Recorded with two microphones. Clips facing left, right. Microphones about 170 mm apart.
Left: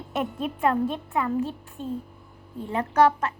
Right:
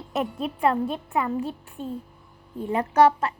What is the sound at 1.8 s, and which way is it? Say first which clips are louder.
Speech: left 1 dB; 45° right (ahead or behind).